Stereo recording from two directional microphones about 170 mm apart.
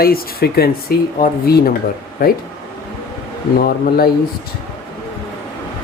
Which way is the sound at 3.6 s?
60° left (ahead or behind).